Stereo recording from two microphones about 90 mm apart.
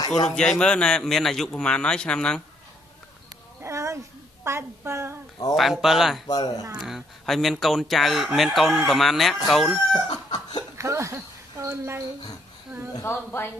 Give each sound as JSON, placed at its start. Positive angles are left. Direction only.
{"t": 0.1, "sound": "a man's voice", "side_deg": 10}
{"t": 3.6, "sound": "cat", "side_deg": -35}
{"t": 4.5, "sound": "a woman's voice", "side_deg": -30}
{"t": 5.6, "sound": "speech", "side_deg": 0}
{"t": 6.2, "sound": "speech", "side_deg": 50}
{"t": 6.8, "sound": "speech", "side_deg": 0}
{"t": 9.9, "sound": "chicken", "side_deg": 55}
{"t": 10.8, "sound": "speech", "side_deg": -35}
{"t": 13.0, "sound": "speech", "side_deg": 25}